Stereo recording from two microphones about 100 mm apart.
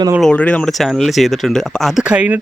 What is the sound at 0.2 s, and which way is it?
Speech, 10° left (ahead or behind).